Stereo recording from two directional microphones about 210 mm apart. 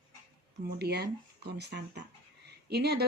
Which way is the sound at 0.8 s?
50° right (ahead or behind).